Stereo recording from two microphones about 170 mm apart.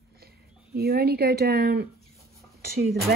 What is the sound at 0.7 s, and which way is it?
Speech, 65° right (ahead or behind).